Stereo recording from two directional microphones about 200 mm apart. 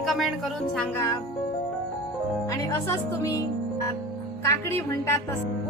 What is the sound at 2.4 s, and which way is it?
Speech, 15° left (ahead or behind).